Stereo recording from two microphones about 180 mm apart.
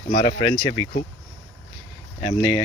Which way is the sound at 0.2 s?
30° left (ahead or behind).